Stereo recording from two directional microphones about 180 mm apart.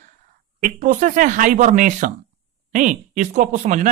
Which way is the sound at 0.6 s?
45° right (ahead or behind).